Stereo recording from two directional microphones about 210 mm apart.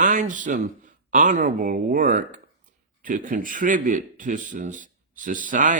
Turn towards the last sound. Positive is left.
turn(degrees=-40)  # may be behind; listen again after turning